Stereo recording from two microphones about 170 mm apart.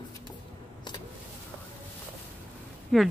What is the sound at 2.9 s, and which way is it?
Speech, centre (ahead or behind).